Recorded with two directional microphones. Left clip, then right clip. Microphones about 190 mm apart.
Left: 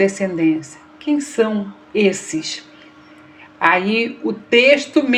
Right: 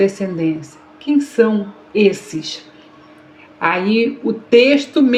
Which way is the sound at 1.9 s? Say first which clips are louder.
Right 2 dB; 45° left (ahead or behind).